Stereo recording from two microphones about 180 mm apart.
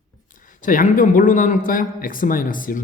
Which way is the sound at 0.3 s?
45° left (ahead or behind).